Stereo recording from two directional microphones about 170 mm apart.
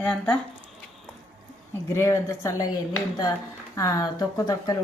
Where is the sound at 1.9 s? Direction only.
15° left (ahead or behind).